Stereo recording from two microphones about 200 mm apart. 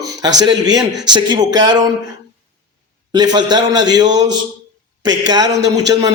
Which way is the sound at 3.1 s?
20° right (ahead or behind).